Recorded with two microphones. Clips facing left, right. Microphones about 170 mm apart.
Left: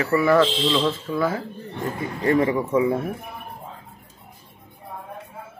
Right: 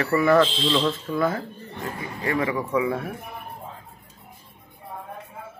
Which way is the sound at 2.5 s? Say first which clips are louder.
Left 3 dB; 25° left (ahead or behind).